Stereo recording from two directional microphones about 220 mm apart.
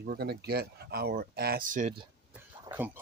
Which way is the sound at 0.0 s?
45° right (ahead or behind).